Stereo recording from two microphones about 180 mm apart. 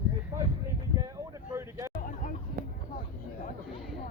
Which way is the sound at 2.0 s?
45° left (ahead or behind).